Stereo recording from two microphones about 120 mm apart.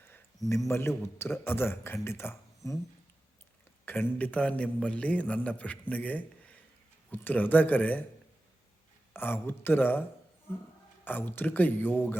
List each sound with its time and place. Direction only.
0.7 s a man's voice: 20° left (ahead or behind)
3.8 s a man's voice: 15° left (ahead or behind)
9.1 s a man's voice: 15° left (ahead or behind)
11.0 s a man's voice: 15° left (ahead or behind)